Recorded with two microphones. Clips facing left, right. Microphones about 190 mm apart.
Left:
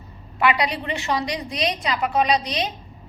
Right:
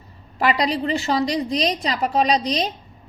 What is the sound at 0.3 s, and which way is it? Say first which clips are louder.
A woman's voice: right 1 dB; 35° right (ahead or behind).